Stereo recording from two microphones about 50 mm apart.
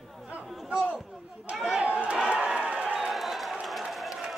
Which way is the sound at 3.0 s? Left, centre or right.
Centre.